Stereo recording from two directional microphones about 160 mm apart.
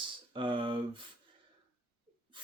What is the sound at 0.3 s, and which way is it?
Speech, 30° right (ahead or behind).